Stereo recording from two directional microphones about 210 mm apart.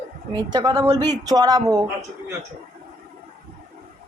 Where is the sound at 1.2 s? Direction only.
20° right (ahead or behind).